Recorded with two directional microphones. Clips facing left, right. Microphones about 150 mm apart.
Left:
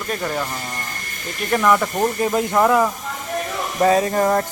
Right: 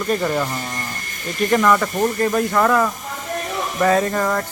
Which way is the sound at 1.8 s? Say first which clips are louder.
Right 1 dB; 15° left (ahead or behind).